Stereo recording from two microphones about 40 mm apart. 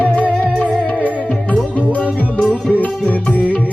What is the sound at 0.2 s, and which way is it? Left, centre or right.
Music, left.